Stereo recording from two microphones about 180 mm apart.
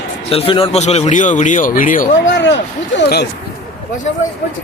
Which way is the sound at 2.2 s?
85° left.